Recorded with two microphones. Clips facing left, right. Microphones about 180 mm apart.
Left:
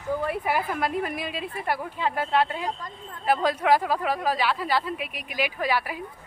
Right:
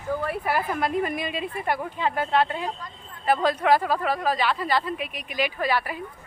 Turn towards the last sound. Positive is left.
turn(degrees=10)  # may be behind; listen again after turning